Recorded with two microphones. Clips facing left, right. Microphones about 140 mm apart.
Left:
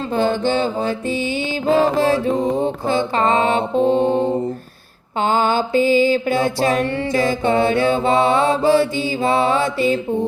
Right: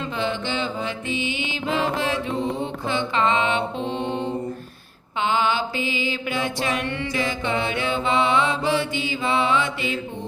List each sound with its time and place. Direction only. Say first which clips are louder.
0.0 s mantra: left 8 dB; 40° left (ahead or behind)